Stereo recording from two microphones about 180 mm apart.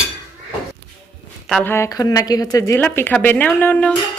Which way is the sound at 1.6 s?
15° left (ahead or behind).